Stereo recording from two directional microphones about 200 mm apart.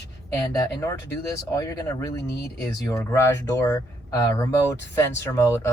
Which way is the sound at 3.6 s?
15° left (ahead or behind).